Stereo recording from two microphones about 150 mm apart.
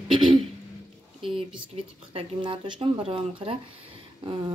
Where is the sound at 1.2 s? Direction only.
35° right (ahead or behind).